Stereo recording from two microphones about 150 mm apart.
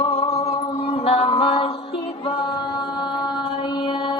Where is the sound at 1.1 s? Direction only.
40° left (ahead or behind).